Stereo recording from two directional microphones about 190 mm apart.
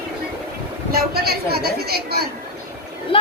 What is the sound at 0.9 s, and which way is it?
A woman's voice, 55° right (ahead or behind).